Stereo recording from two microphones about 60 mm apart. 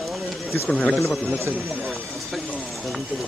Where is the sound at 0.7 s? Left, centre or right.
Left.